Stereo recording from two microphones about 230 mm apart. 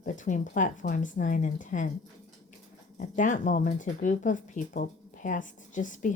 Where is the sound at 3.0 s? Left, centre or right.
Left.